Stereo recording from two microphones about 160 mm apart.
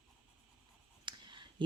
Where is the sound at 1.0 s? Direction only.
30° right (ahead or behind).